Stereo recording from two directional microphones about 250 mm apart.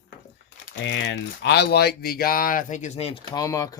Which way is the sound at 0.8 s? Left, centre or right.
Left.